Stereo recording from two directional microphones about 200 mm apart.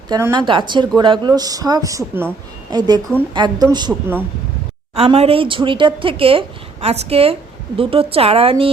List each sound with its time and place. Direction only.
0.1 s speech: 15° right (ahead or behind)
4.9 s a woman's voice: 30° right (ahead or behind)